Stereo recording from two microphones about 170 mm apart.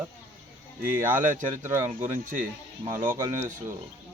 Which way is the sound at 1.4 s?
45° right (ahead or behind).